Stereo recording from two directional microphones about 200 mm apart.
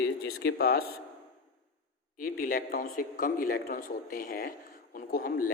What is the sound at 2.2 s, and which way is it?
Speech, 45° left (ahead or behind).